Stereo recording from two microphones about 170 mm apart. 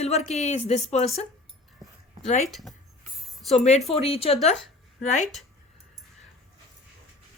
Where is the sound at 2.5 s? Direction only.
Centre (ahead or behind).